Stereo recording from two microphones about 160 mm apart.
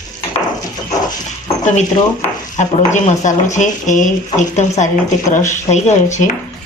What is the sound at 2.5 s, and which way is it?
Speech, 50° left (ahead or behind).